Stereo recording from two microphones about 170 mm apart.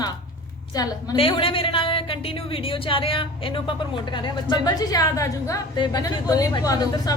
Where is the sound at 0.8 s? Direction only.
30° left (ahead or behind).